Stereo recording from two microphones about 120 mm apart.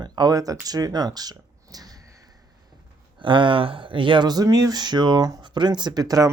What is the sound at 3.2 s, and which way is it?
Speech, 45° right (ahead or behind).